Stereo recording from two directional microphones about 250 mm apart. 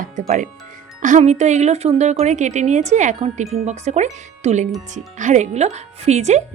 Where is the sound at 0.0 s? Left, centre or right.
Right.